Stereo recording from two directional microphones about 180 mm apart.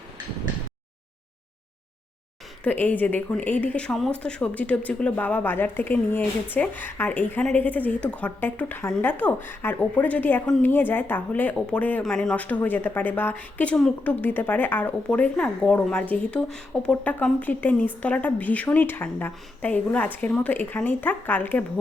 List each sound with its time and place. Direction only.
2.6 s speech: 10° left (ahead or behind)